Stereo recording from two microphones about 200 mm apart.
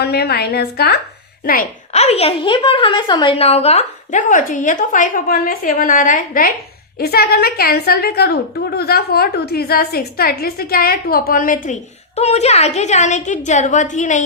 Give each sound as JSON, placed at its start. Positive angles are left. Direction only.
{"t": 0.0, "sound": "a woman's voice", "side_deg": 55}
{"t": 1.9, "sound": "a woman's voice", "side_deg": 30}